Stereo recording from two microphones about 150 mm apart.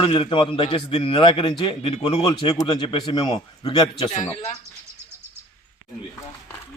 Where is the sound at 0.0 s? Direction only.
35° left (ahead or behind).